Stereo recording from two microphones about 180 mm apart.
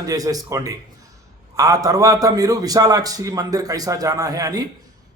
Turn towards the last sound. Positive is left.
turn(degrees=-20)  # may be behind; listen again after turning